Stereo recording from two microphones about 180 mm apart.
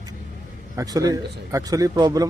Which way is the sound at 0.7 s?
20° right (ahead or behind).